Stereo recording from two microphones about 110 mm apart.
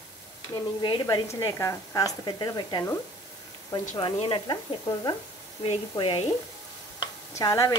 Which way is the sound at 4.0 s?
50° left (ahead or behind).